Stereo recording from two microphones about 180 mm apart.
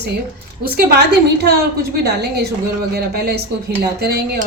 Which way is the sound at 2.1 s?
65° right (ahead or behind).